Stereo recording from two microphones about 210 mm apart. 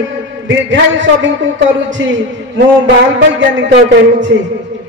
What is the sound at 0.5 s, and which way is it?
A man's voice, 60° right (ahead or behind).